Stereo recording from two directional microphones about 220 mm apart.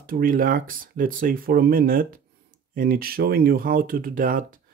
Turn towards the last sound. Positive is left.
turn(degrees=-40)  # may be behind; listen again after turning